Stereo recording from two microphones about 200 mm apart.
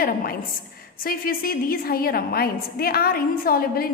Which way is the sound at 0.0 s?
45° left (ahead or behind).